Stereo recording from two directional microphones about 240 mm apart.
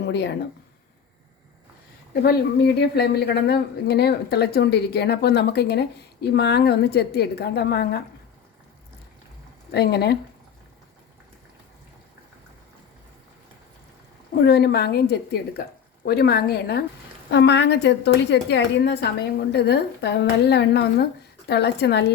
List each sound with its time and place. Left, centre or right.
0.0 s speech: left
2.2 s a woman's voice: left
9.7 s a woman's voice: left
14.4 s a woman's voice: left